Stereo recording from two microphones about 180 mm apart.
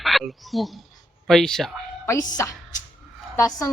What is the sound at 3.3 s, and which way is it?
Speech, 20° left (ahead or behind).